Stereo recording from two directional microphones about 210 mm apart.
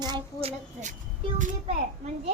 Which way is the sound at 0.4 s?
35° right (ahead or behind).